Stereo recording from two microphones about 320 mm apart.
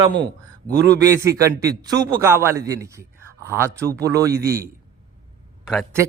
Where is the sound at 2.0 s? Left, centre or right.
Centre.